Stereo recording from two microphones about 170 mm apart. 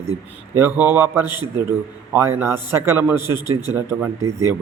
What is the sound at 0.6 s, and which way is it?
A man's voice, 15° right (ahead or behind).